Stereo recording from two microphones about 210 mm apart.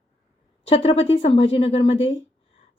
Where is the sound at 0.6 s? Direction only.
30° left (ahead or behind).